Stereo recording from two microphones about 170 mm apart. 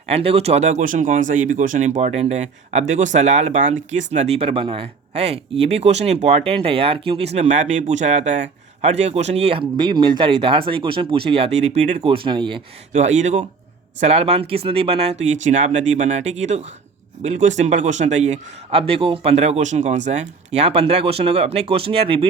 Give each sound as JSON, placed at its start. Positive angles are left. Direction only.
{"t": 0.1, "sound": "speech", "side_deg": -35}
{"t": 12.9, "sound": "speech", "side_deg": -45}